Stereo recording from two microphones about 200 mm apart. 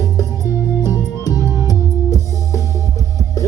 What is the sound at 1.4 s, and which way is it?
Music, 15° right (ahead or behind).